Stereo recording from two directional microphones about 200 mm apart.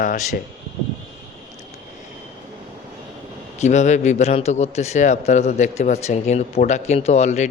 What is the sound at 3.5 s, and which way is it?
Speech, 35° left (ahead or behind).